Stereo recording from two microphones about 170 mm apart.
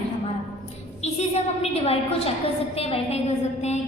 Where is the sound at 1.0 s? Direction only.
40° left (ahead or behind).